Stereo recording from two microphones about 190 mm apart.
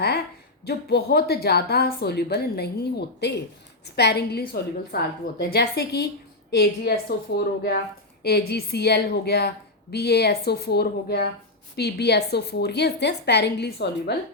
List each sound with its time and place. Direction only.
0.6 s a woman's voice: 55° left (ahead or behind)